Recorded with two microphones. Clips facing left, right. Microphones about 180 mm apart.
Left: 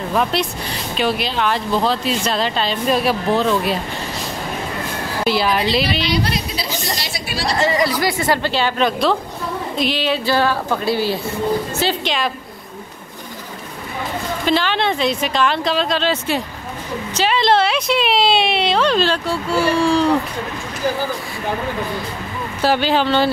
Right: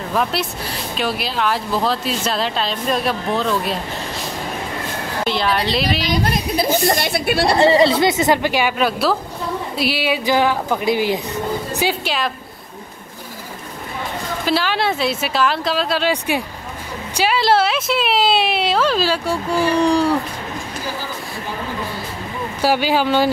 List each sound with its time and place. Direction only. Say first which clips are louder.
0.1 s speech: left 1 dB; centre (ahead or behind)
5.2 s speech: left 2 dB; 5° left (ahead or behind)
5.9 s a woman's voice: even; 45° right (ahead or behind)
7.5 s speech: right 4 dB; 30° right (ahead or behind); by 12.3 s 5° right (ahead or behind)
14.4 s speech: left 1 dB; 5° right (ahead or behind)
22.6 s speech: even; 10° right (ahead or behind)